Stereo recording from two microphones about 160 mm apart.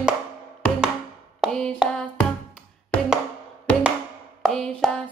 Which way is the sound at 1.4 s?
5° left (ahead or behind).